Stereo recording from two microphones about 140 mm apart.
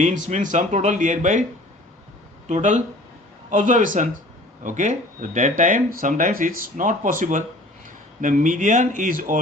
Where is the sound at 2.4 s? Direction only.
60° right (ahead or behind).